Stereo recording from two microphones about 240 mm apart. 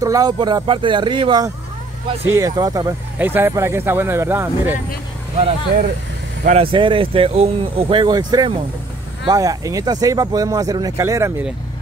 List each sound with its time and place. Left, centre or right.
0.0 s speech: centre
6.4 s speech: right